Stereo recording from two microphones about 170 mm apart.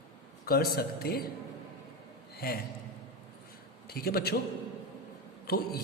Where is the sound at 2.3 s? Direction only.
65° left (ahead or behind).